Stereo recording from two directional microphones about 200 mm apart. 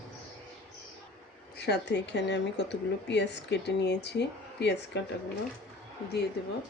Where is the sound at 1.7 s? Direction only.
60° left (ahead or behind).